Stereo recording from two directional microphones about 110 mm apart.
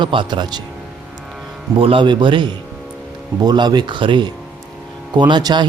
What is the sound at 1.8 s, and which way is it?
A man's voice, 50° right (ahead or behind).